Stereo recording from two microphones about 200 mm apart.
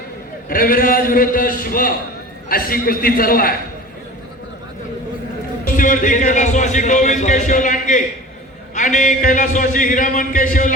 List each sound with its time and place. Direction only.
0.4 s a man's voice: 45° left (ahead or behind)
5.7 s a man's voice: 40° left (ahead or behind)